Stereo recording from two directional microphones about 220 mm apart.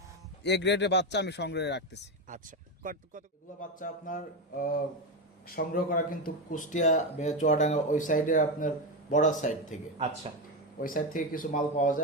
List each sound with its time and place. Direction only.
0.4 s speech: 50° left (ahead or behind)
2.8 s speech: 35° right (ahead or behind)
3.8 s speech: 35° left (ahead or behind)
10.8 s speech: 40° left (ahead or behind)